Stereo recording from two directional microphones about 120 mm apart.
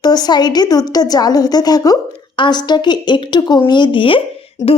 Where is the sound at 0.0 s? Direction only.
35° left (ahead or behind).